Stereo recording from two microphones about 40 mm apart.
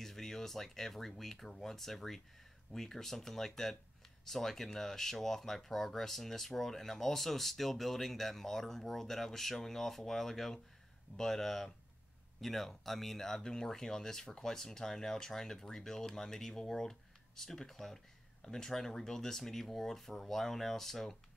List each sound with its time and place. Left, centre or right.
0.0 s speech: centre